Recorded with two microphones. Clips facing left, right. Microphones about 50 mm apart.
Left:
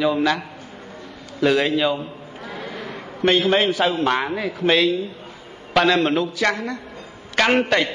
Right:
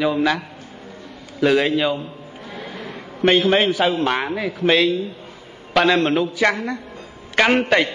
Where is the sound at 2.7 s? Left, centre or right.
Centre.